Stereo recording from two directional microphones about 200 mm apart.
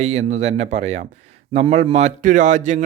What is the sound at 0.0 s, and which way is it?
A man's voice, 35° right (ahead or behind).